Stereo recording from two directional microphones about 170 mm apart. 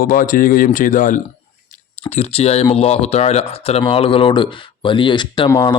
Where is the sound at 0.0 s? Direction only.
55° left (ahead or behind).